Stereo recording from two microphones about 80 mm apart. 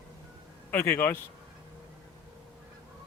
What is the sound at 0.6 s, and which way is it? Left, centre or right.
Speech, left.